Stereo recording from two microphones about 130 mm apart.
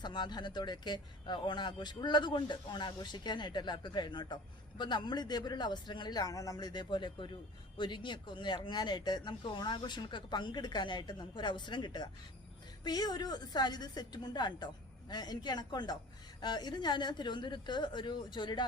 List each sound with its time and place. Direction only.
0.0 s speech: 35° left (ahead or behind)